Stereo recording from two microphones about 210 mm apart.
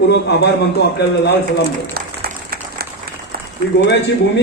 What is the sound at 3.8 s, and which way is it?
Speech, 55° left (ahead or behind).